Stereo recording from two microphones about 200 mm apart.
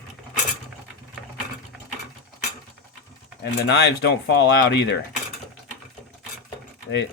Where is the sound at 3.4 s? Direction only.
55° left (ahead or behind).